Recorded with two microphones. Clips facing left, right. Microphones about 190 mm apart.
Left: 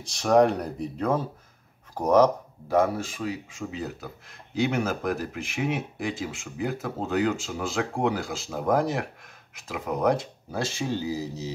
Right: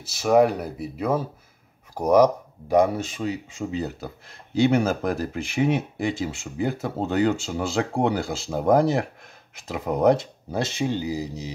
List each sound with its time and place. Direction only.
0.0 s speech: 5° right (ahead or behind)